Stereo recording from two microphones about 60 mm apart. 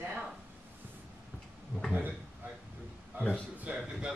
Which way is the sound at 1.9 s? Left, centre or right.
Right.